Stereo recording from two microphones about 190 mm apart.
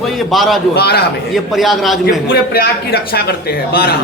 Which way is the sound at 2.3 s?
50° left (ahead or behind).